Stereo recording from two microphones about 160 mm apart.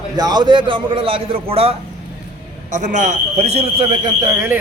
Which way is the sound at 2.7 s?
50° right (ahead or behind).